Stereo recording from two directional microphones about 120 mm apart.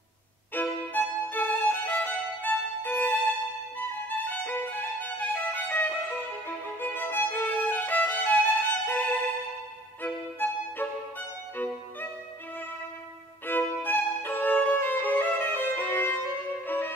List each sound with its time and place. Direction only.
0.6 s violin: 15° left (ahead or behind)
3.7 s music: 15° left (ahead or behind)
6.8 s violin: 15° left (ahead or behind)
10.0 s violin: 15° left (ahead or behind)
13.5 s violin: 15° left (ahead or behind)
16.6 s music: 15° left (ahead or behind)